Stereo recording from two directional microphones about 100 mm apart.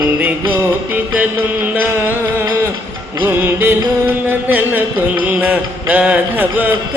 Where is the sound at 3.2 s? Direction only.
25° right (ahead or behind).